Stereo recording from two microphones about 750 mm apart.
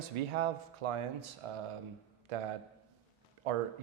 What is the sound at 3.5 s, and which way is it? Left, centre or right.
Speech, right.